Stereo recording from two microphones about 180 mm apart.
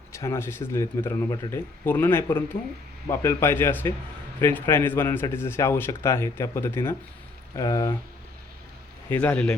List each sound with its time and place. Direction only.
0.1 s speech: 15° left (ahead or behind)
9.0 s speech: 10° left (ahead or behind)